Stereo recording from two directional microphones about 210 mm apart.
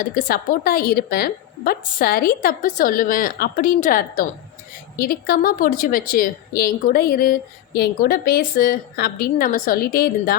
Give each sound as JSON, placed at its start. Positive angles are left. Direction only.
{"t": 0.0, "sound": "a woman's voice", "side_deg": 40}